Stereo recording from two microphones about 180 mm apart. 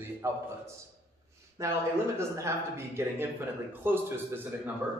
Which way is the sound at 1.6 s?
15° right (ahead or behind).